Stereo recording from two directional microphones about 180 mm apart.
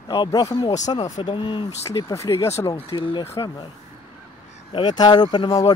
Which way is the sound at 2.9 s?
30° left (ahead or behind).